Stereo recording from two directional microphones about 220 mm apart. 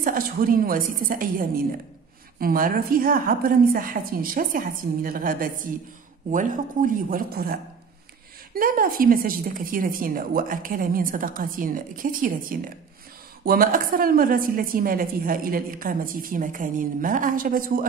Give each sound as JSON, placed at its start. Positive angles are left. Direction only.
{"t": 0.0, "sound": "a woman's voice", "side_deg": -40}
{"t": 2.4, "sound": "a woman's voice", "side_deg": -40}
{"t": 8.5, "sound": "a woman's voice", "side_deg": -40}